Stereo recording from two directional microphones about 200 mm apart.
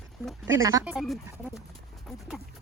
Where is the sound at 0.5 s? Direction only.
15° right (ahead or behind).